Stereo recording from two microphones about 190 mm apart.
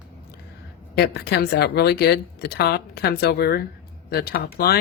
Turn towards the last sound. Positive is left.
turn(degrees=55)  # may be behind; listen again after turning